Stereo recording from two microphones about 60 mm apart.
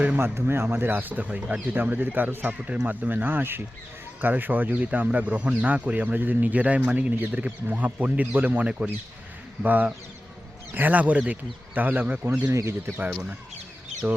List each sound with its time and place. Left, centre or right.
0.2 s speech: right
9.6 s speech: right
12.5 s speech: right